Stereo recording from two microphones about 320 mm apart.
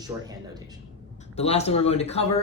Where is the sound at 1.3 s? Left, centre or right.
Centre.